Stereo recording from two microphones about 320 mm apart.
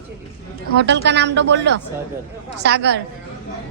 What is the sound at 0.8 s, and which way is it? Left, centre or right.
A man's voice, right.